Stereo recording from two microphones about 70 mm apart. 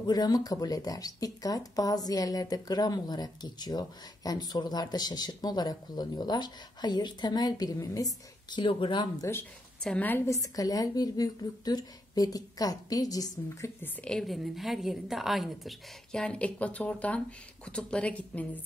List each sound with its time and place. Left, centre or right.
0.0 s speech: left
9.9 s speech: left
10.2 s a woman's voice: left
14.2 s a woman's voice: centre
16.1 s a woman's voice: centre